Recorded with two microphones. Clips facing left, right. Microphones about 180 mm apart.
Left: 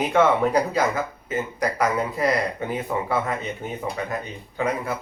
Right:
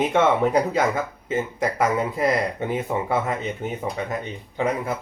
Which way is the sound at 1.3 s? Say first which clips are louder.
Right 2 dB; 25° right (ahead or behind).